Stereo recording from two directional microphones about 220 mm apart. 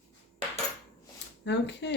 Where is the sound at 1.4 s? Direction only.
55° left (ahead or behind).